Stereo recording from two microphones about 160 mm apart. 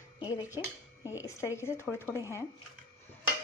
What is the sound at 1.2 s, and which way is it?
Dishes, 20° left (ahead or behind).